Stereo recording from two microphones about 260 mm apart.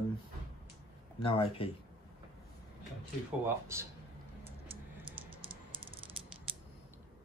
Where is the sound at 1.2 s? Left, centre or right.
Left.